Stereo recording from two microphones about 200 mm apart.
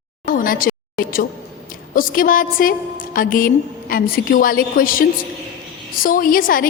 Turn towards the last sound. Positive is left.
turn(degrees=45)  # may be behind; listen again after turning